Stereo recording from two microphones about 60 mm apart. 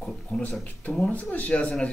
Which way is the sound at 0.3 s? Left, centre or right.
Left.